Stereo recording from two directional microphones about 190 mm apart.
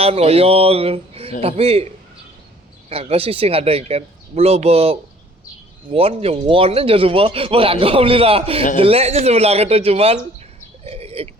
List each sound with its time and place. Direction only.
0.0 s speech: 30° right (ahead or behind)
2.9 s speech: 30° right (ahead or behind)
10.8 s a sound: 30° right (ahead or behind)